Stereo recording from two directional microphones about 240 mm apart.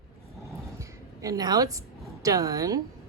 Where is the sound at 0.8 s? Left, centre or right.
Centre.